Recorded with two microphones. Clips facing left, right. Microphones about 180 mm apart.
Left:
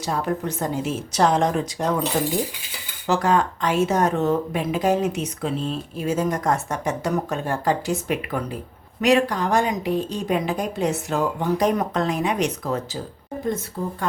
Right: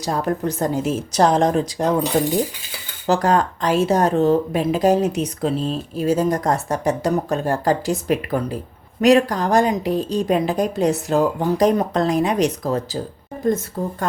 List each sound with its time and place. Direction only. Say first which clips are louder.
0.0 s speech: right 3 dB; 40° right (ahead or behind)
3.1 s speech: right 3 dB; 40° right (ahead or behind)